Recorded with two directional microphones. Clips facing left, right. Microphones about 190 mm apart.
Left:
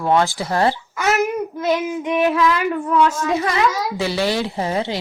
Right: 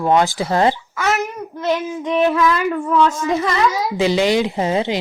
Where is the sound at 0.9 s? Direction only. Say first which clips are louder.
Left 1 dB; centre (ahead or behind).